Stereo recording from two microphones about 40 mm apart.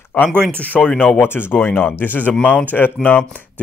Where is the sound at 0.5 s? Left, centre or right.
Left.